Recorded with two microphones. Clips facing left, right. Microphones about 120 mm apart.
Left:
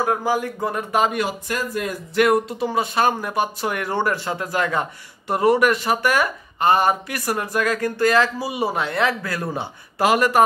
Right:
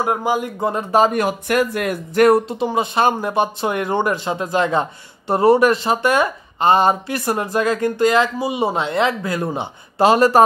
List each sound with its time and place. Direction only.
0.0 s speech: 20° right (ahead or behind); by 1.2 s 35° right (ahead or behind)
1.2 s speech: 65° right (ahead or behind)
2.1 s speech: 40° right (ahead or behind)
2.4 s speech: 20° right (ahead or behind)